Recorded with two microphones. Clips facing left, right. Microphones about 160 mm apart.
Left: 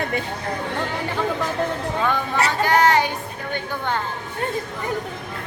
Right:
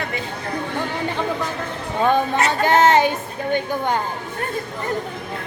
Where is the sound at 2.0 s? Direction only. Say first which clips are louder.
Right 7 dB; 20° right (ahead or behind).